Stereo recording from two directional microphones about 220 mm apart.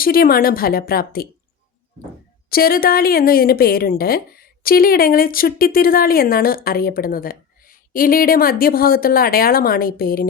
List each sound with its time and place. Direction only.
0.0 s a woman's voice: 40° left (ahead or behind)
2.5 s a woman's voice: 40° left (ahead or behind)